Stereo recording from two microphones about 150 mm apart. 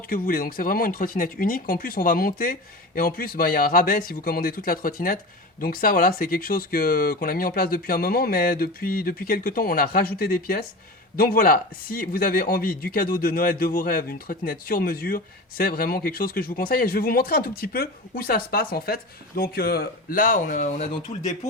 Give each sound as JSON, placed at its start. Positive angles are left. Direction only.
{"t": 0.1, "sound": "speech", "side_deg": 75}